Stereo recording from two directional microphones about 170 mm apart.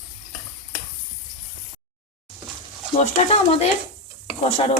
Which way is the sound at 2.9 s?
40° left (ahead or behind).